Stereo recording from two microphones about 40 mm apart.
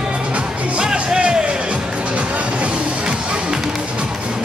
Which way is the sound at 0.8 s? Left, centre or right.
Right.